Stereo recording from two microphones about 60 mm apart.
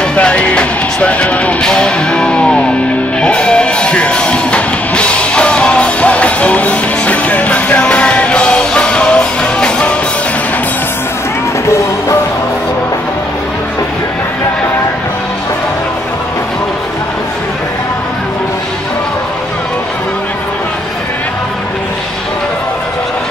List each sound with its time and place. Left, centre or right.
0.1 s music: centre